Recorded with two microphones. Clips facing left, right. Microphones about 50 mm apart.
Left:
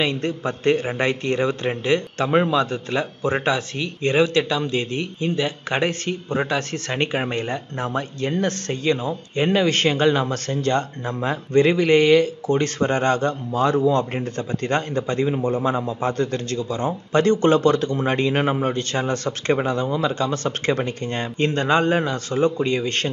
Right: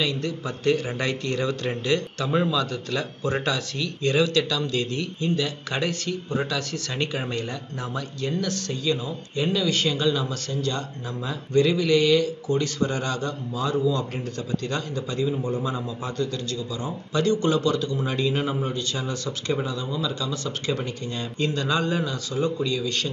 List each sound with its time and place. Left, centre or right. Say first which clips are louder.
0.0 s a man's voice: left 4 dB; left